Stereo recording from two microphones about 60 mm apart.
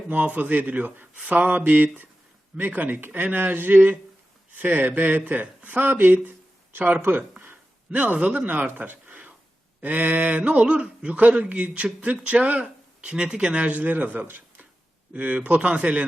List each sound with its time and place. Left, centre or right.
0.1 s speech: right